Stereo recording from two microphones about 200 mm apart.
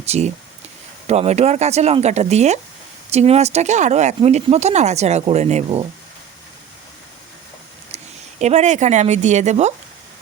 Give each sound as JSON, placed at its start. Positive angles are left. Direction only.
{"t": 0.0, "sound": "speech", "side_deg": -30}
{"t": 7.9, "sound": "speech", "side_deg": -35}